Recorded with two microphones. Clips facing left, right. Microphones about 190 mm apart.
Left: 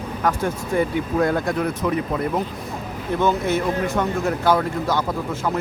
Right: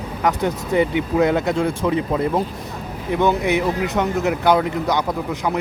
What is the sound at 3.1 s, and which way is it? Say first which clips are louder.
Speech: right 2 dB; 15° right (ahead or behind).